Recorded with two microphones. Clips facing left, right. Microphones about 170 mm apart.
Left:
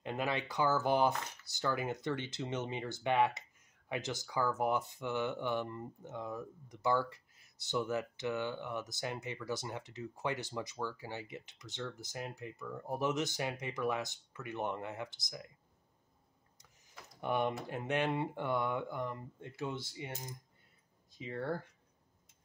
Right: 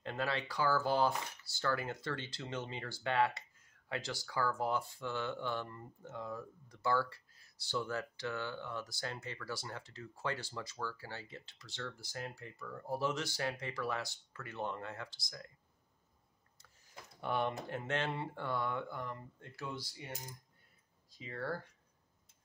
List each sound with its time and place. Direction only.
0.0 s speech: 15° left (ahead or behind)
17.2 s speech: 15° left (ahead or behind)
21.2 s speech: 20° left (ahead or behind)